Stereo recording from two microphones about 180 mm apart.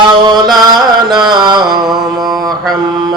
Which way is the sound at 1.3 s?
25° right (ahead or behind).